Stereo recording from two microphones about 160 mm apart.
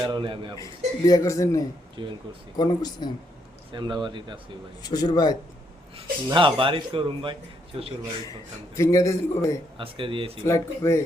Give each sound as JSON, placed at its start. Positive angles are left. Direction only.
{"t": 0.1, "sound": "speech", "side_deg": -30}
{"t": 0.6, "sound": "speech", "side_deg": 20}
{"t": 2.0, "sound": "speech", "side_deg": -30}
{"t": 2.6, "sound": "speech", "side_deg": 25}
{"t": 3.7, "sound": "speech", "side_deg": -30}
{"t": 4.8, "sound": "speech", "side_deg": 25}
{"t": 6.3, "sound": "speech", "side_deg": -30}
{"t": 8.7, "sound": "speech", "side_deg": 20}
{"t": 9.7, "sound": "speech", "side_deg": -35}
{"t": 10.4, "sound": "speech", "side_deg": 15}